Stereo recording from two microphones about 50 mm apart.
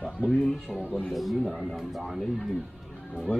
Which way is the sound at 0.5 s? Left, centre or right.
Centre.